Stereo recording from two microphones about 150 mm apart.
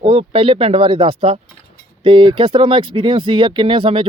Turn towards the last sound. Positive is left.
turn(degrees=-35)  # may be behind; listen again after turning